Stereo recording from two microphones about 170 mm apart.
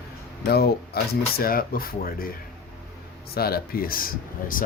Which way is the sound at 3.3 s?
65° left (ahead or behind).